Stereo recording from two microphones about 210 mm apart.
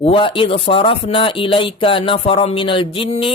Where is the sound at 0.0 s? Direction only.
25° left (ahead or behind).